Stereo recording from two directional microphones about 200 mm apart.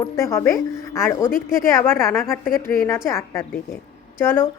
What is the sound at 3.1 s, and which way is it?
A woman's voice, 15° left (ahead or behind).